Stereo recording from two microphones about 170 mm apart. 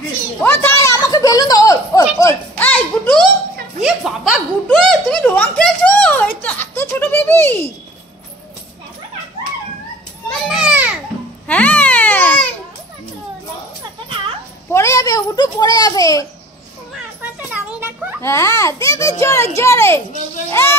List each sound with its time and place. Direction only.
0.4 s a sound: 15° left (ahead or behind)
3.8 s chuckle: centre (ahead or behind)
6.4 s baby laughter: 10° left (ahead or behind)
10.5 s children playing: 5° right (ahead or behind)
11.4 s baby cry: 10° left (ahead or behind)
14.7 s a sound: 15° left (ahead or behind)
17.2 s children playing: 10° right (ahead or behind)
18.2 s a sound: 15° left (ahead or behind)
20.4 s child singing: 15° left (ahead or behind)